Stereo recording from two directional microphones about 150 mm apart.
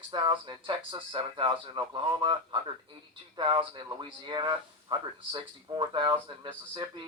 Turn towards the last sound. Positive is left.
turn(degrees=-30)  # may be behind; listen again after turning